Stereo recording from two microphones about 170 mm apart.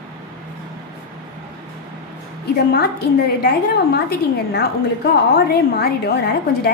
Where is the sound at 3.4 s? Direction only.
65° left (ahead or behind).